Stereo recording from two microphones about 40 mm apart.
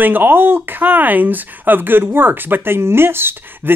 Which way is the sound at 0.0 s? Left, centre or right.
Right.